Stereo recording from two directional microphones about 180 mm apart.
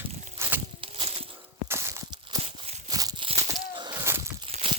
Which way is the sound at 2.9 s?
20° right (ahead or behind).